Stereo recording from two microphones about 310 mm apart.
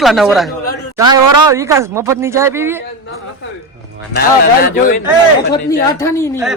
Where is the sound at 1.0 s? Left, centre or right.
Centre.